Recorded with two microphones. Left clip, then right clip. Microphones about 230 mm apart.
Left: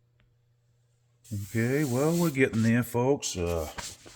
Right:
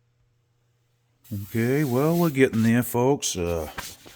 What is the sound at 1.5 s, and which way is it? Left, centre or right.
Speech, right.